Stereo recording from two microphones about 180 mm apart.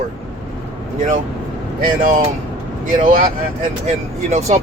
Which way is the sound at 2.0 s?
50° right (ahead or behind).